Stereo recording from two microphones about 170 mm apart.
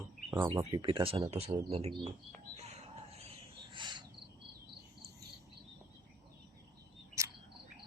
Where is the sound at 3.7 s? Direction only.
25° right (ahead or behind).